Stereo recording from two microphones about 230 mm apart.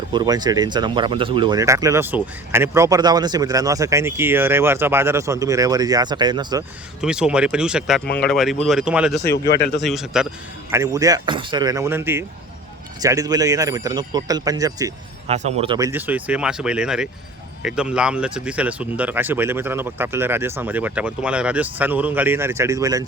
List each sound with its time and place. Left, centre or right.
0.1 s speech: centre
7.0 s speech: centre
9.5 s a man's voice: left
9.8 s speech: centre
10.7 s speech: centre
15.3 s speech: right
15.9 s speech: centre